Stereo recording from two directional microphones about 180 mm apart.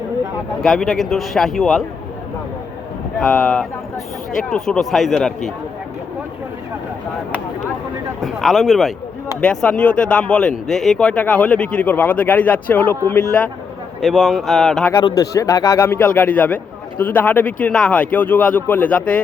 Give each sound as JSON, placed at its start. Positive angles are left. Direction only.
{"t": 0.6, "sound": "speech", "side_deg": 0}
{"t": 3.2, "sound": "speech", "side_deg": 5}
{"t": 8.2, "sound": "speech", "side_deg": 0}
{"t": 14.0, "sound": "speech", "side_deg": 0}
{"t": 14.9, "sound": "speech", "side_deg": 20}